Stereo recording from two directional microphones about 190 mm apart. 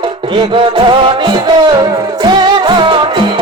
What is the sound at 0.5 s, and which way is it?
Music, 25° right (ahead or behind).